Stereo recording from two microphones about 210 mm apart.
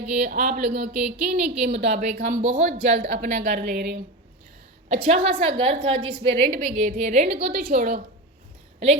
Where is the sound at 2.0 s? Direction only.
35° right (ahead or behind).